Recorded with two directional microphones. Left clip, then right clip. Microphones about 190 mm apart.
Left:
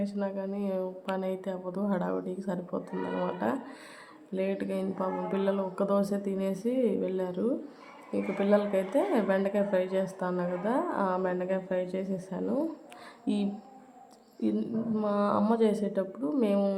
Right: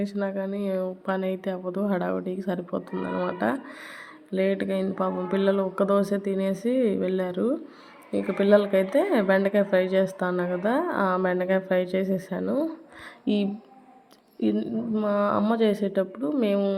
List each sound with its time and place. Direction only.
0.0 s speech: 15° right (ahead or behind)